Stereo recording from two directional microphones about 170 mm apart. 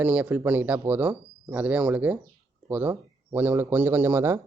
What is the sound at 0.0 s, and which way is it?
A man's voice, 10° right (ahead or behind).